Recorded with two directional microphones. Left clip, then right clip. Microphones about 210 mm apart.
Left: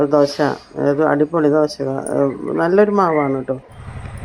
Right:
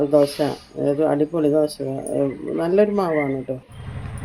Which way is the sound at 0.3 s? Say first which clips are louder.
Left 5 dB; 10° left (ahead or behind).